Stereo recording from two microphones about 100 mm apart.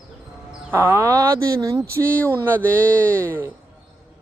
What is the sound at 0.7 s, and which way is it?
Speech, 20° right (ahead or behind).